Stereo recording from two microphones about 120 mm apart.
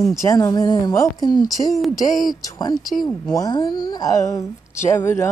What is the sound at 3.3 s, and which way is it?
Speech, 30° left (ahead or behind).